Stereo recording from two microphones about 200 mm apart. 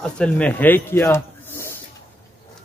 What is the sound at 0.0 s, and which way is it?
A man's voice, 5° left (ahead or behind).